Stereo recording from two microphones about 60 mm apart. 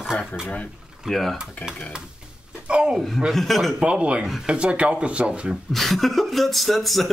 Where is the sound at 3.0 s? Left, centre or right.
Centre.